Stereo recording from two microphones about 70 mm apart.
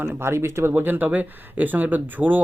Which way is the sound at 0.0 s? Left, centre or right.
Right.